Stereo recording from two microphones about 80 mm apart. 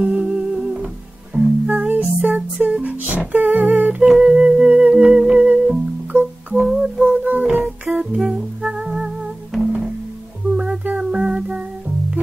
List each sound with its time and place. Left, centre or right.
0.0 s music: centre
3.4 s humming: centre
4.2 s music: centre